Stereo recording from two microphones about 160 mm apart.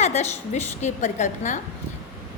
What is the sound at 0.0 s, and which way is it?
A woman's voice, 45° left (ahead or behind).